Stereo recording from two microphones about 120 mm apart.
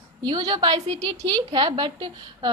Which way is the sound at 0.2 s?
35° right (ahead or behind).